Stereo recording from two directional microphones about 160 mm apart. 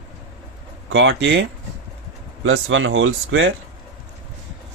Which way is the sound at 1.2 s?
90° right.